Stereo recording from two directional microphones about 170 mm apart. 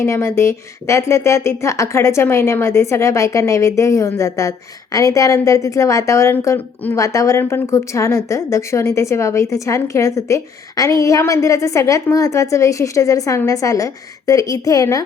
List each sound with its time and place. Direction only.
0.0 s speech: 15° left (ahead or behind)